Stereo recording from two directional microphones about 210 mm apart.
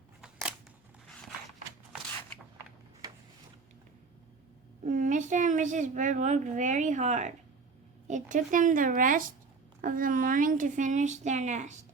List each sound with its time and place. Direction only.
4.8 s a woman's voice: 35° right (ahead or behind)